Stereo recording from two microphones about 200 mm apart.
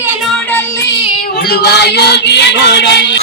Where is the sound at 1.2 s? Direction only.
50° left (ahead or behind).